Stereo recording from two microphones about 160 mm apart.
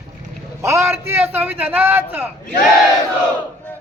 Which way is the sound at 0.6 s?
15° right (ahead or behind).